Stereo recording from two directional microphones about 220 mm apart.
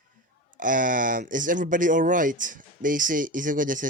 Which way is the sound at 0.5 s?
35° right (ahead or behind).